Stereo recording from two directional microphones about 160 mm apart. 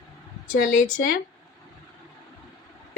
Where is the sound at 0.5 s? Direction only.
60° left (ahead or behind).